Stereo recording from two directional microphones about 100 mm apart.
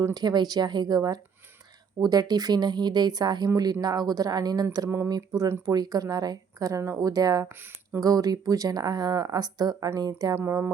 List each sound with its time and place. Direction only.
0.0 s speech: 40° right (ahead or behind)
7.4 s speech: 25° right (ahead or behind)
8.0 s speech: 40° right (ahead or behind)
10.3 s speech: 25° right (ahead or behind)